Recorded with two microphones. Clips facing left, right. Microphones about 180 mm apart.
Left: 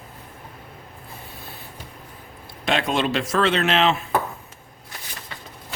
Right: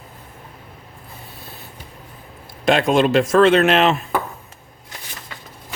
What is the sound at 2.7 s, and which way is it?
Speech, 45° right (ahead or behind).